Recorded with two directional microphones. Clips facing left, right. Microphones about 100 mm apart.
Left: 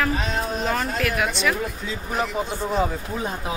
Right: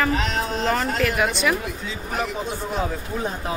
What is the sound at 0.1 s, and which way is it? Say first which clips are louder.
Speech: right 2 dB; 90° right.